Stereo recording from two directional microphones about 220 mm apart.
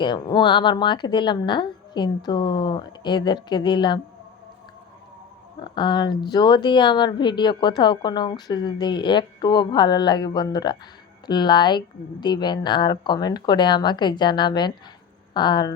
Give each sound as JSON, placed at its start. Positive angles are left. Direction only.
{"t": 0.0, "sound": "a woman's voice", "side_deg": 20}
{"t": 5.6, "sound": "a woman's voice", "side_deg": 20}